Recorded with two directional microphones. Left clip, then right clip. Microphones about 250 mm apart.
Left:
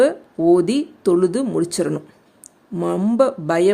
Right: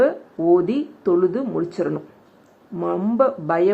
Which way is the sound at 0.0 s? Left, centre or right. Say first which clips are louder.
Left 2 dB; left.